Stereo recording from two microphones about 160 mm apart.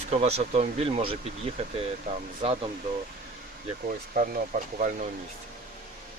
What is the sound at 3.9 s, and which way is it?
Speech, 60° right (ahead or behind).